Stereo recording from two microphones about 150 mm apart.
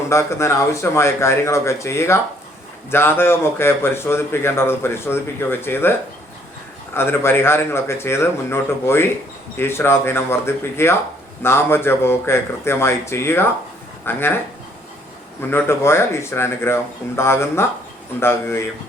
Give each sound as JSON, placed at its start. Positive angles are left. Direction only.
{"t": 0.1, "sound": "a man's voice", "side_deg": 20}
{"t": 6.9, "sound": "a man's voice", "side_deg": 15}
{"t": 15.4, "sound": "a man's voice", "side_deg": 15}